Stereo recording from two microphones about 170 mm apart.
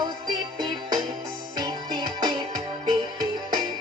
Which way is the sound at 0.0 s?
25° right (ahead or behind).